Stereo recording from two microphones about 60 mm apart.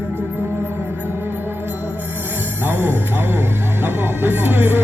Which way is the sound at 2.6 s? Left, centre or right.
Right.